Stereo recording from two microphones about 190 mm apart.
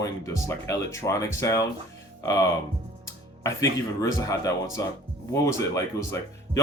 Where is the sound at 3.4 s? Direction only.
15° left (ahead or behind).